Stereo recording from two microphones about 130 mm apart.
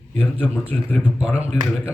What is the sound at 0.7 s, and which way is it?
Speech, 10° right (ahead or behind).